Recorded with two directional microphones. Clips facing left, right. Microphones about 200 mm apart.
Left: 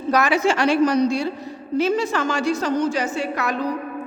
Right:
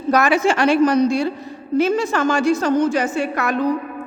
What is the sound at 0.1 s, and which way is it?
A woman's voice, 50° right (ahead or behind).